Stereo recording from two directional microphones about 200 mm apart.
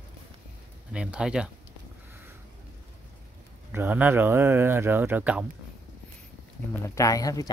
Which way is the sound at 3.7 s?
10° right (ahead or behind).